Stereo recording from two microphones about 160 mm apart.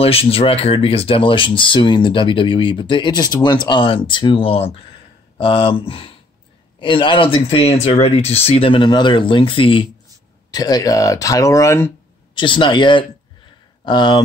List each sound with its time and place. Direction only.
0.0 s speech: 35° left (ahead or behind)
10.5 s speech: 25° left (ahead or behind)
12.4 s speech: 30° left (ahead or behind)